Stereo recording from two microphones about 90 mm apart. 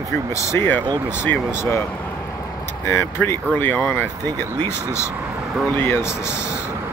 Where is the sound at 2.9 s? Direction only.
25° left (ahead or behind).